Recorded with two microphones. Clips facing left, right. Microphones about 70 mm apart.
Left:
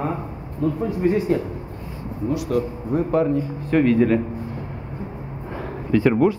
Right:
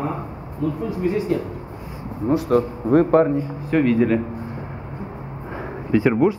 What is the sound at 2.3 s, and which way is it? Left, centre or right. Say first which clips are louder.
A man's voice: right 5 dB; right.